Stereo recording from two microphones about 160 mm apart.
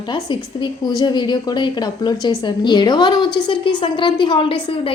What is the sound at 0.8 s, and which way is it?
A woman's voice, 25° left (ahead or behind).